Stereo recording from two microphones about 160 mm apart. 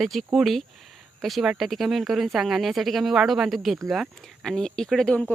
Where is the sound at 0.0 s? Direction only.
Centre (ahead or behind).